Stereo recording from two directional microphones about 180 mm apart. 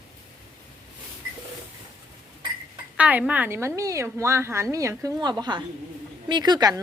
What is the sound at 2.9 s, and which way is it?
A woman's voice, 10° right (ahead or behind).